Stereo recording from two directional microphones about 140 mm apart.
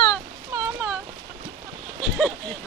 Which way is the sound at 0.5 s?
15° right (ahead or behind).